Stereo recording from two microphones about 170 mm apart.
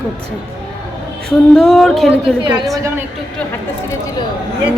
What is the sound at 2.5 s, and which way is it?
Speech, 20° right (ahead or behind).